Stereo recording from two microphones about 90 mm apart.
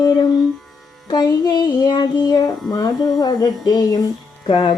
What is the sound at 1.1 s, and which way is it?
Speech, 50° left (ahead or behind).